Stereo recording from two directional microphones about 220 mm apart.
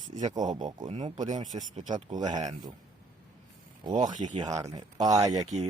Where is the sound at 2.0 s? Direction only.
20° right (ahead or behind).